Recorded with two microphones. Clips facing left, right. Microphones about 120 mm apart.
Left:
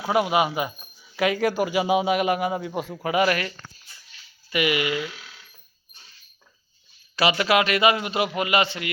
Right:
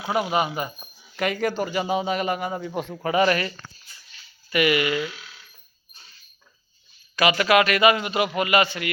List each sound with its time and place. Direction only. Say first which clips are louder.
0.1 s a man's voice: left 2 dB; 5° left (ahead or behind)
4.4 s speech: right 2 dB; 15° left (ahead or behind)
7.3 s a man's voice: right 2 dB; 25° left (ahead or behind)